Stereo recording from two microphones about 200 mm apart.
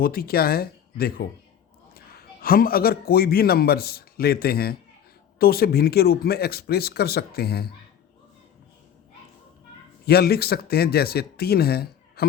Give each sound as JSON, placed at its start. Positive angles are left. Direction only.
{"t": 0.0, "sound": "a man's voice", "side_deg": 50}
{"t": 10.1, "sound": "speech", "side_deg": 50}